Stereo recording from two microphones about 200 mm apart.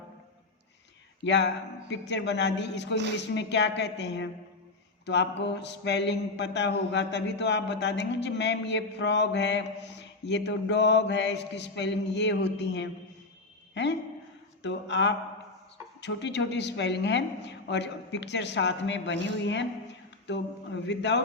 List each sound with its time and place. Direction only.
1.2 s mantra: 60° left (ahead or behind)
14.6 s mantra: 60° left (ahead or behind)